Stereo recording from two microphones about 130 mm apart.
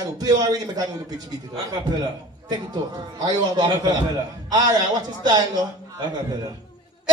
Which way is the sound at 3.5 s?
35° right (ahead or behind).